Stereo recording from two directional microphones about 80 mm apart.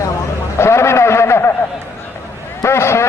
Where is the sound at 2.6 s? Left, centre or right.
Left.